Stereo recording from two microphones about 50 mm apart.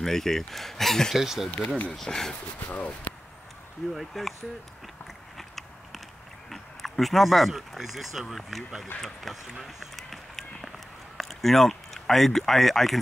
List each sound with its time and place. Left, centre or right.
0.0 s speech: centre
1.1 s speech: centre
1.9 s speech: centre
2.7 s speech: left
3.9 s speech: centre
5.4 s biting: centre
6.5 s speech: centre
9.0 s run: centre
11.1 s speech: centre